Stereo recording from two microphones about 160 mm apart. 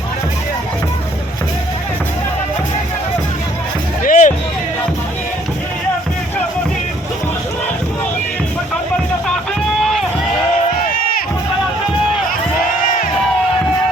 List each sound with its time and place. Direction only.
4.0 s music: 55° left (ahead or behind)
9.2 s music: 5° left (ahead or behind)
10.8 s crowd: 65° left (ahead or behind)